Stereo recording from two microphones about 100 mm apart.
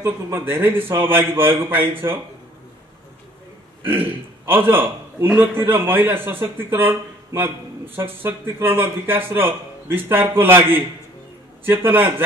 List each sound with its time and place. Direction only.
0.0 s speech: 25° right (ahead or behind)
3.8 s a man's voice: 20° right (ahead or behind)